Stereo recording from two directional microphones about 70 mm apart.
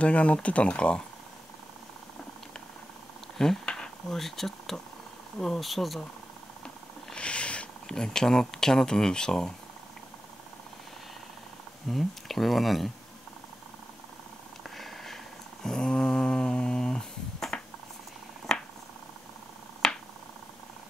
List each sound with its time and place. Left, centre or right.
0.0 s speech: centre
3.3 s speech: centre
6.6 s a sound: centre
11.9 s speech: centre
14.8 s purr: centre
15.6 s a sound: centre
19.8 s finger snapping: centre